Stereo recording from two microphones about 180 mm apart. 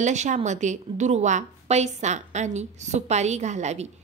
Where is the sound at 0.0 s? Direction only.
40° right (ahead or behind).